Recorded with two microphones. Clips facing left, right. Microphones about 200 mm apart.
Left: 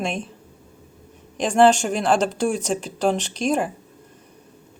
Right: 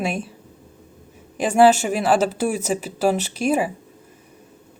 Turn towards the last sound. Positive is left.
turn(degrees=-5)  # may be behind; listen again after turning